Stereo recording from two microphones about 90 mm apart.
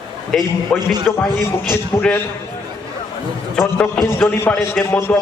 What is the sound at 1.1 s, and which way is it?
A man's voice, 30° left (ahead or behind).